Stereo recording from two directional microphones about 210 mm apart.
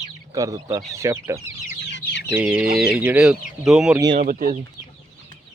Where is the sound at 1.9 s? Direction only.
55° left (ahead or behind).